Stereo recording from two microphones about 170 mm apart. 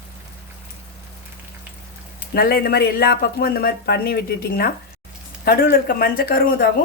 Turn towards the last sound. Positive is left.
turn(degrees=60)  # may be behind; listen again after turning